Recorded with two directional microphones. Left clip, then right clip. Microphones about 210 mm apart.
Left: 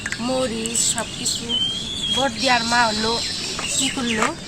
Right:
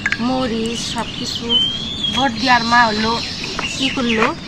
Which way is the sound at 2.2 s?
20° left (ahead or behind).